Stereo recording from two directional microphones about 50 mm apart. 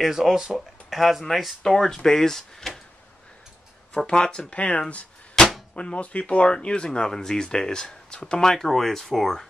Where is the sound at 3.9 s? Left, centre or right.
Centre.